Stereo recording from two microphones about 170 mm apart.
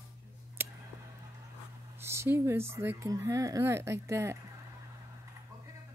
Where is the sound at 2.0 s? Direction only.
15° right (ahead or behind).